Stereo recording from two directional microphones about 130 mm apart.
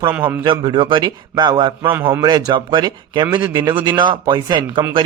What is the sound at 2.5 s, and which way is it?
A man's voice, 35° right (ahead or behind).